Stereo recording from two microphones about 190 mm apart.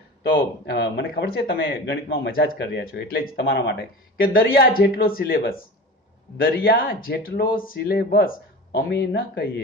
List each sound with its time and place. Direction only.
0.3 s speech: 60° left (ahead or behind)